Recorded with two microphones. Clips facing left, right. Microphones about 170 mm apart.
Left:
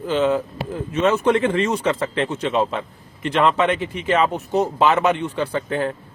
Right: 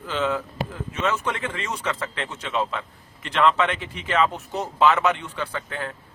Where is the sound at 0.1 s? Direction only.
25° left (ahead or behind).